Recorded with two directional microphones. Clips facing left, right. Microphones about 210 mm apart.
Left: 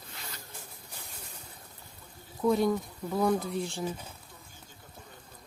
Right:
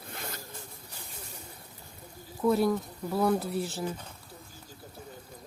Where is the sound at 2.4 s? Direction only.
5° right (ahead or behind).